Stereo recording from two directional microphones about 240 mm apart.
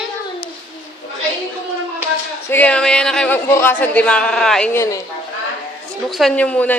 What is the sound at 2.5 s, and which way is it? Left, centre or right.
Speech, centre.